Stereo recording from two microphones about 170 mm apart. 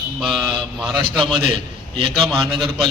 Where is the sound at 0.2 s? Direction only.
5° right (ahead or behind).